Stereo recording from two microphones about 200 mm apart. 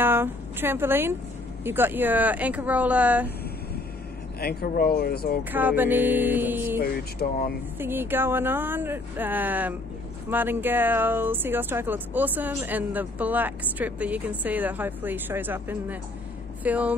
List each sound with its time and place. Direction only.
0.0 s a woman's voice: 10° right (ahead or behind)
4.4 s speech: 50° left (ahead or behind)
5.5 s speech: 10° right (ahead or behind)
6.8 s speech: 50° left (ahead or behind)
7.8 s speech: 10° right (ahead or behind)